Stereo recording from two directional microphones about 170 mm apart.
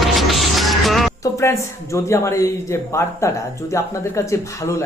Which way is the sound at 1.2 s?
15° left (ahead or behind).